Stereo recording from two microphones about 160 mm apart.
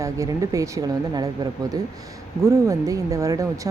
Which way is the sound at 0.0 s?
20° right (ahead or behind).